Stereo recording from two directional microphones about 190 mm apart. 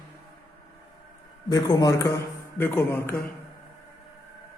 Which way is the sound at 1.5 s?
20° left (ahead or behind).